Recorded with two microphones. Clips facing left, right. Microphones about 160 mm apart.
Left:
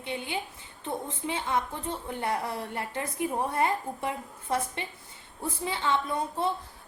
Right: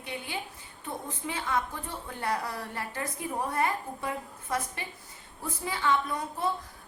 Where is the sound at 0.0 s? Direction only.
20° left (ahead or behind).